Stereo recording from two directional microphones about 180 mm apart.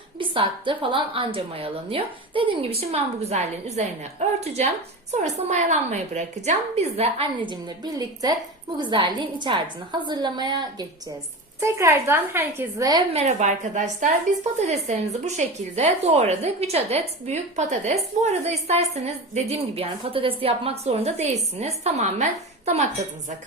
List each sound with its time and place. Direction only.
0.2 s a woman's voice: 30° right (ahead or behind)
13.1 s speech: 40° right (ahead or behind)